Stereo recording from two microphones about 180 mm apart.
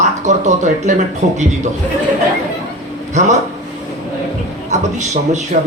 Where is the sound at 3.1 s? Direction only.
40° right (ahead or behind).